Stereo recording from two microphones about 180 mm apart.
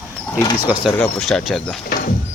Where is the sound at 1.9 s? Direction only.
50° left (ahead or behind).